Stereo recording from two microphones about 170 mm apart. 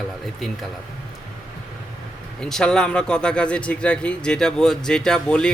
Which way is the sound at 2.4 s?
5° left (ahead or behind).